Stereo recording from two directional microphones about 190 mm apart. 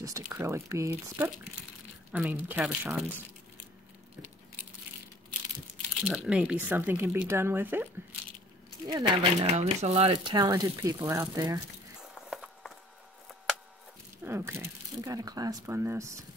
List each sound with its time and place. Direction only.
0.0 s speech: 15° right (ahead or behind)
6.0 s speech: 5° right (ahead or behind)
8.8 s speech: 20° right (ahead or behind)
9.6 s speech: 35° right (ahead or behind); by 11.6 s 20° right (ahead or behind)
12.3 s patter: centre (ahead or behind)
14.2 s speech: 15° right (ahead or behind)